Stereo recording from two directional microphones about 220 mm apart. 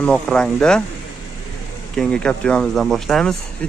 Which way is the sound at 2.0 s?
5° left (ahead or behind).